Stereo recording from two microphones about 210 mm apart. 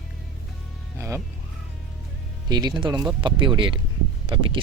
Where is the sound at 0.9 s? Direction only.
10° right (ahead or behind).